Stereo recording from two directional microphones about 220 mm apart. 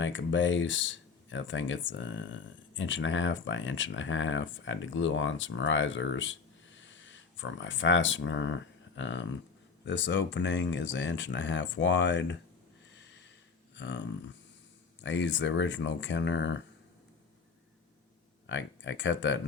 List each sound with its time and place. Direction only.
0.0 s speech: 60° left (ahead or behind)
13.7 s speech: 55° left (ahead or behind)
18.4 s speech: 55° left (ahead or behind)